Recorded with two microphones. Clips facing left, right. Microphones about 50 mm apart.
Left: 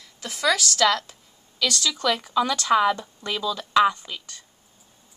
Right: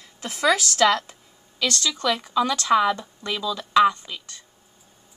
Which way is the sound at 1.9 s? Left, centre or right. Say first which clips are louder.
Even; centre.